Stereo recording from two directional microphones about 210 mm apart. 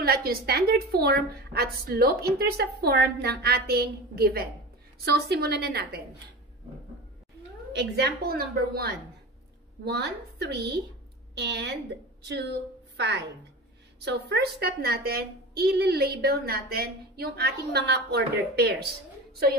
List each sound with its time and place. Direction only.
0.0 s a woman's voice: 45° right (ahead or behind)
7.7 s a woman's voice: 55° right (ahead or behind)